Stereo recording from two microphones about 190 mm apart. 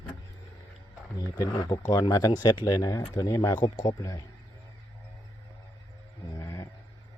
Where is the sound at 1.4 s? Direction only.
20° left (ahead or behind).